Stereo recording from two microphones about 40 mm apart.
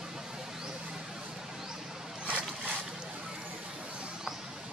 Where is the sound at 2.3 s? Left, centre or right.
Right.